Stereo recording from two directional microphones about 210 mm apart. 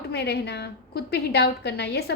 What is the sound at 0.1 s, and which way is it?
A woman's voice, 50° left (ahead or behind).